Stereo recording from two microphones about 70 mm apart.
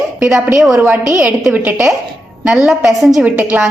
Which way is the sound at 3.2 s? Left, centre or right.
Right.